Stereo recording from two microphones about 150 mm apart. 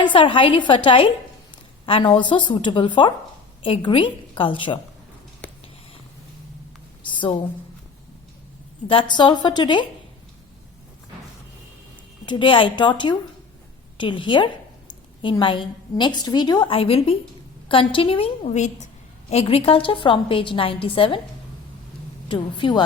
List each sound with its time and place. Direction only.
0.0 s a woman's voice: 35° left (ahead or behind)
7.0 s a sound: 30° left (ahead or behind)
8.9 s a woman's voice: 35° left (ahead or behind)
12.2 s a woman's voice: 30° left (ahead or behind)
18.4 s a woman's voice: 50° left (ahead or behind)
22.3 s a woman's voice: 35° left (ahead or behind)